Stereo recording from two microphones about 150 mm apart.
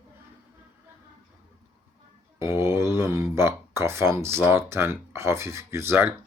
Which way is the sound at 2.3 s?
20° right (ahead or behind).